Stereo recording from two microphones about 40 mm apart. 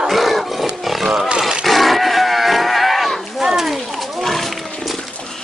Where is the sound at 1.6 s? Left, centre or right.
Centre.